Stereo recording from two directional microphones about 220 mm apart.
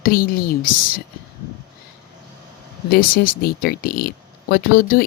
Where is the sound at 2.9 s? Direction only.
40° left (ahead or behind).